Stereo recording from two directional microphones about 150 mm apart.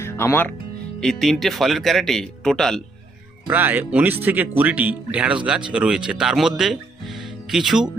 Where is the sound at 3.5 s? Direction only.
10° right (ahead or behind).